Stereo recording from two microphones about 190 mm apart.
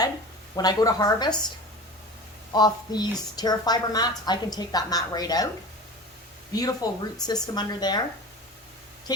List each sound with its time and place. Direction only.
0.5 s a woman's voice: 20° left (ahead or behind)
2.5 s a woman's voice: 20° left (ahead or behind)
6.5 s a woman's voice: 20° left (ahead or behind)
9.1 s a sound: 20° left (ahead or behind)